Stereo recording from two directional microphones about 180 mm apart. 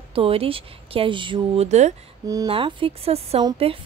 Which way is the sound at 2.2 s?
20° right (ahead or behind).